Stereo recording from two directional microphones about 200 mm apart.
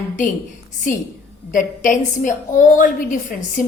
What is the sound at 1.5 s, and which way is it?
A woman's voice, 40° left (ahead or behind).